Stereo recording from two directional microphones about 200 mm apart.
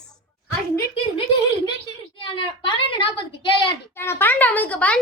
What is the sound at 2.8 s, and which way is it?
Speech, 25° left (ahead or behind).